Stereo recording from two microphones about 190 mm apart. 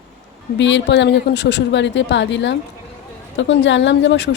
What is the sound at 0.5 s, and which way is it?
A woman's voice, 70° left (ahead or behind).